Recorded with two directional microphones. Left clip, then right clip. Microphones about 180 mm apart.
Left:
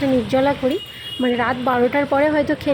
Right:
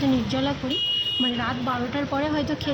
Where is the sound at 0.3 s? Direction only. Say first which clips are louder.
Left 9 dB; 30° left (ahead or behind).